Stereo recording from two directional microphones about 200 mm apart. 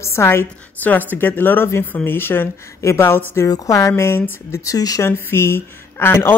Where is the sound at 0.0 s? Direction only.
15° left (ahead or behind).